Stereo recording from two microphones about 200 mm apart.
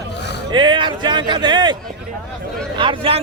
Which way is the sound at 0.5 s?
25° right (ahead or behind).